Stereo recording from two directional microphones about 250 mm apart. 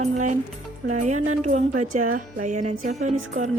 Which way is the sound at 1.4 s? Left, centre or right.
Right.